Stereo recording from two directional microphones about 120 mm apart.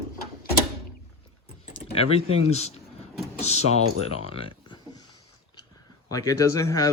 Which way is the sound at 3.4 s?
70° left (ahead or behind).